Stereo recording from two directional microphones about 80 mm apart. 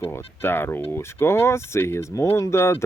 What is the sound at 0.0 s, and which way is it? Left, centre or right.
Speech, left.